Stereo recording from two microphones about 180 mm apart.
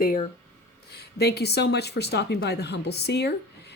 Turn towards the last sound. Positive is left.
turn(degrees=65)  # may be behind; listen again after turning